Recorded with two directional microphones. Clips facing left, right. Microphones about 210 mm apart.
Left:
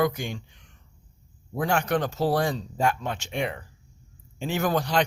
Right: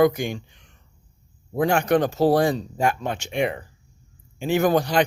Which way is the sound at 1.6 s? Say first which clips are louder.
Right 5 dB; 15° right (ahead or behind).